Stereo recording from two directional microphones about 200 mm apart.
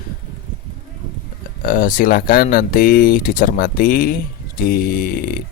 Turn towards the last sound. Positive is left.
turn(degrees=50)  # may be behind; listen again after turning